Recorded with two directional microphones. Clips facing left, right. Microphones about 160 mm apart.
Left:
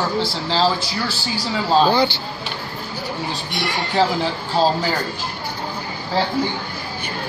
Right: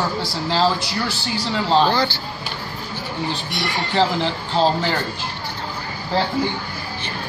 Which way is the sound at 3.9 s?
5° left (ahead or behind).